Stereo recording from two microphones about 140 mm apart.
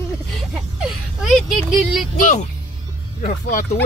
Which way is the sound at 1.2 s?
5° right (ahead or behind).